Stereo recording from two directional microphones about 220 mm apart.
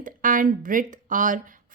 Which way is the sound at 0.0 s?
40° right (ahead or behind).